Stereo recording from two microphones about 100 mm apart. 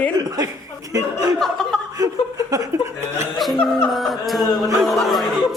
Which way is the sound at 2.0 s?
35° right (ahead or behind).